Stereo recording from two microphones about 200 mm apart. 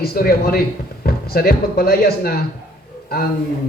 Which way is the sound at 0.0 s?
50° left (ahead or behind).